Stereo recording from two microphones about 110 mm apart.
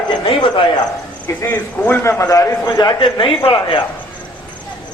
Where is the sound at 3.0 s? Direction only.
55° left (ahead or behind).